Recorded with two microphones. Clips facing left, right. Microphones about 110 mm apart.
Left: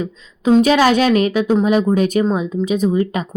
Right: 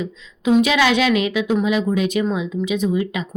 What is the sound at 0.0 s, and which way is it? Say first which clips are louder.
A woman's voice: left 3 dB; 40° left (ahead or behind).